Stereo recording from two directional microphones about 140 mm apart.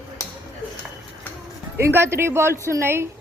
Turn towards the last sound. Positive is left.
turn(degrees=-20)  # may be behind; listen again after turning